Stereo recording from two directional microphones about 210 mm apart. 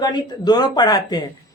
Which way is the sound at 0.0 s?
20° left (ahead or behind).